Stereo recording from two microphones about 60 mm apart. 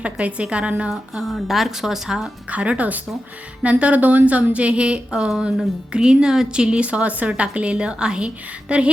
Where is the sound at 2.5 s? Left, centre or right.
Right.